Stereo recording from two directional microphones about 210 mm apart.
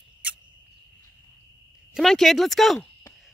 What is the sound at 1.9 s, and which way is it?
Speech, centre (ahead or behind).